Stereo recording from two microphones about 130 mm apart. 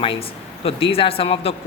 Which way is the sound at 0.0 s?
45° left (ahead or behind).